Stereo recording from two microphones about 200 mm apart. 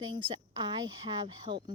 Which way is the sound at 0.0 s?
25° right (ahead or behind).